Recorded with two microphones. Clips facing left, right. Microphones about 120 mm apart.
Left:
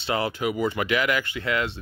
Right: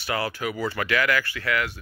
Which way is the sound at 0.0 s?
25° left (ahead or behind).